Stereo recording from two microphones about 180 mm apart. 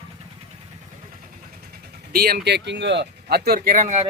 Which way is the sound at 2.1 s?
60° right (ahead or behind).